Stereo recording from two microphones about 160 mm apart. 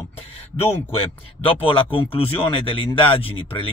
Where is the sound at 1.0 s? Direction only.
35° left (ahead or behind).